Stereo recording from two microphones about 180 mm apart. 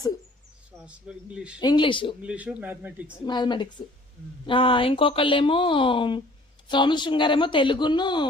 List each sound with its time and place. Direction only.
0.9 s a man's voice: 5° right (ahead or behind)
1.5 s speech: 25° left (ahead or behind)
2.2 s a man's voice: 5° right (ahead or behind)
3.2 s speech: 25° left (ahead or behind)